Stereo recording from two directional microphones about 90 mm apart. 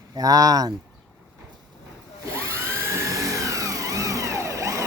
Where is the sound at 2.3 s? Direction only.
30° right (ahead or behind).